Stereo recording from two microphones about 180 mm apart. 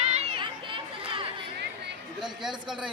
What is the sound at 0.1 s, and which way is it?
Chatter, 35° right (ahead or behind).